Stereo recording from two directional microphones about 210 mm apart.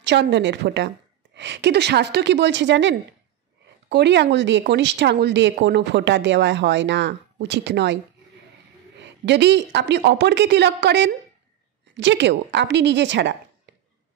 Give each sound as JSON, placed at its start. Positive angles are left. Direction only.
{"t": 0.0, "sound": "a woman's voice", "side_deg": -55}